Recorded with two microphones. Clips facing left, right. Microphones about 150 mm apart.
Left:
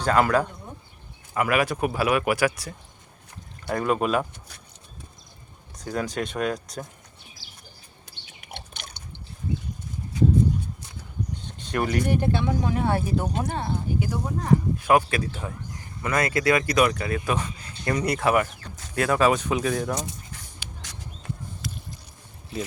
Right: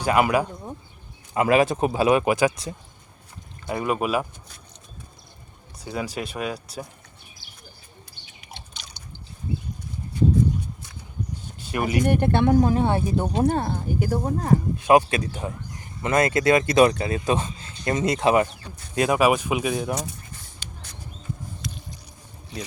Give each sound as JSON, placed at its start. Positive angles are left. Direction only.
{"t": 0.0, "sound": "speech", "side_deg": -10}
{"t": 1.3, "sound": "speech", "side_deg": -25}
{"t": 3.7, "sound": "speech", "side_deg": -5}
{"t": 5.8, "sound": "speech", "side_deg": -5}
{"t": 8.4, "sound": "a sound", "side_deg": 55}
{"t": 11.4, "sound": "a sound", "side_deg": -5}
{"t": 12.0, "sound": "speech", "side_deg": -60}
{"t": 12.7, "sound": "speech", "side_deg": -25}
{"t": 13.5, "sound": "speech", "side_deg": -45}
{"t": 14.8, "sound": "speech", "side_deg": -20}
{"t": 21.6, "sound": "boat", "side_deg": 5}